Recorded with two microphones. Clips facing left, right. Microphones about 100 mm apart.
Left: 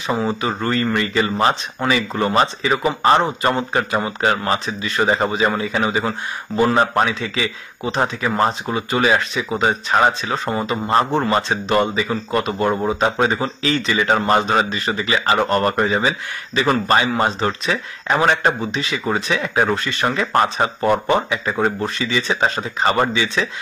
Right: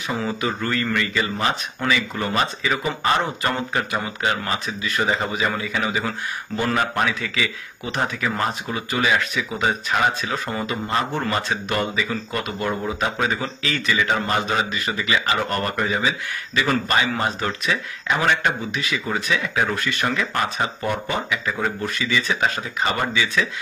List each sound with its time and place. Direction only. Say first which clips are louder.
0.0 s speech: left 4 dB; 25° left (ahead or behind)